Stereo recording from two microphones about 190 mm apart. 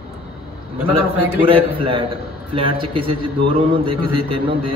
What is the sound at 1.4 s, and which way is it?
A man's voice, 30° right (ahead or behind).